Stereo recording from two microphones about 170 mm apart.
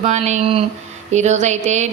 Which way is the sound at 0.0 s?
40° right (ahead or behind).